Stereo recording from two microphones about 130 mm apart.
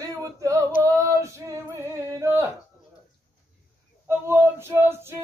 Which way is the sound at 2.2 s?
20° right (ahead or behind).